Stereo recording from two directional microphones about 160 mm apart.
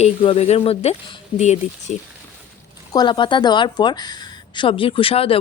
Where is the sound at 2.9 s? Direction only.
30° left (ahead or behind).